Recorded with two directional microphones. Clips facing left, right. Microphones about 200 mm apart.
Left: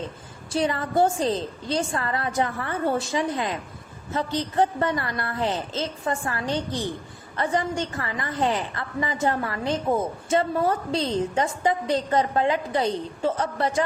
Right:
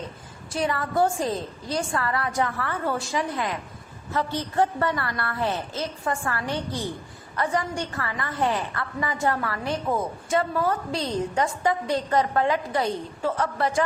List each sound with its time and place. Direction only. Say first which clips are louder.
0.5 s a woman's voice: left 2 dB; 25° left (ahead or behind)